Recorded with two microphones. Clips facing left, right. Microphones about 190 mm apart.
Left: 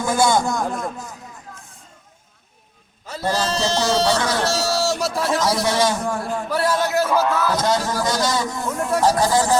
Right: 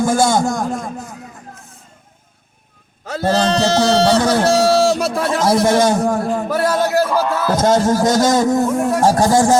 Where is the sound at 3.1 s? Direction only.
65° right (ahead or behind).